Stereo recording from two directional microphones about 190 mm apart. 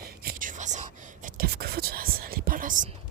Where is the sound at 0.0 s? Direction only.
50° right (ahead or behind).